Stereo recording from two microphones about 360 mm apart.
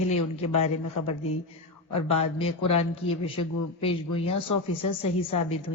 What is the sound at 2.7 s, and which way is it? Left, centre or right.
A man's voice, centre.